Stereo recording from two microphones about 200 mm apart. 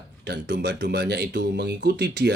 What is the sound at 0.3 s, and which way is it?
Speech, 60° right (ahead or behind).